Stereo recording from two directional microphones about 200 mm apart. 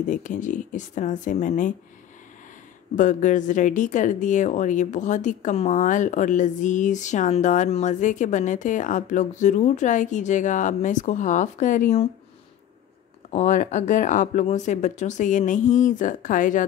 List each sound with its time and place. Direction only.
0.1 s speech: 40° left (ahead or behind)
3.0 s speech: 40° left (ahead or behind)
13.3 s speech: 35° left (ahead or behind)